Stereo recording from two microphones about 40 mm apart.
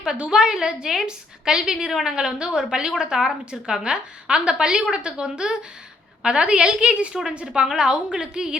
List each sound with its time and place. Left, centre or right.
0.0 s a woman's voice: centre
2.1 s a woman's voice: right
7.1 s a woman's voice: centre